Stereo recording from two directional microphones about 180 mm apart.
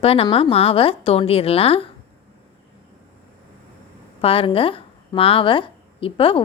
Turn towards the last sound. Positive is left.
turn(degrees=30)  # may be behind; listen again after turning